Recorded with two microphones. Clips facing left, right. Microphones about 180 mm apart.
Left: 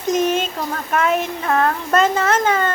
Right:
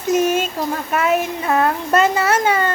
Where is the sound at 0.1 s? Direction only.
10° right (ahead or behind).